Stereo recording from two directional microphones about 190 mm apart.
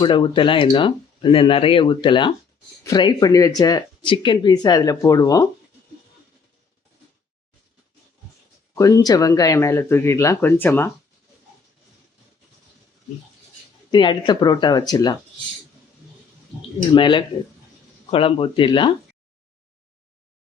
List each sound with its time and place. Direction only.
0.0 s speech: 25° left (ahead or behind)
8.7 s speech: 15° left (ahead or behind)
13.9 s speech: 25° left (ahead or behind)
16.9 s speech: 25° left (ahead or behind)